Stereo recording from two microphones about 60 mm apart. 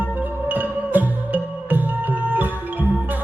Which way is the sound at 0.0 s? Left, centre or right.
Right.